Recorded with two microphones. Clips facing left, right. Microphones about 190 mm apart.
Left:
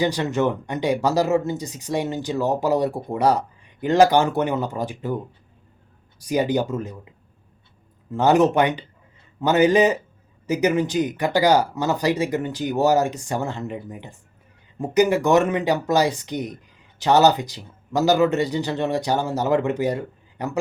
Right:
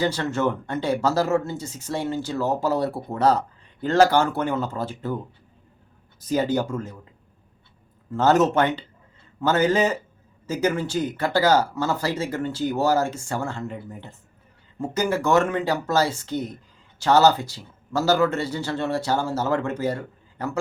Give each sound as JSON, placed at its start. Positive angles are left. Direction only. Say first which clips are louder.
{"t": 0.0, "sound": "speech", "louder": "left 2 dB", "side_deg": 15}
{"t": 6.1, "sound": "speech", "louder": "left 1 dB", "side_deg": 15}
{"t": 8.1, "sound": "speech", "louder": "left 2 dB", "side_deg": 15}